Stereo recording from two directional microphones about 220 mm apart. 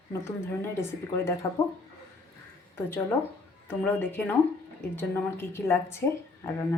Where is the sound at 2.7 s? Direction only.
10° left (ahead or behind).